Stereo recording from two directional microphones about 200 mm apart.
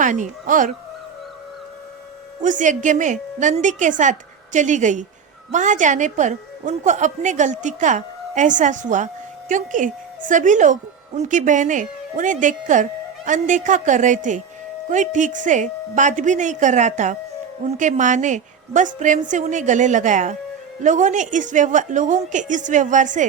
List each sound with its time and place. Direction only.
0.0 s speech: 40° right (ahead or behind)
2.4 s speech: 40° right (ahead or behind)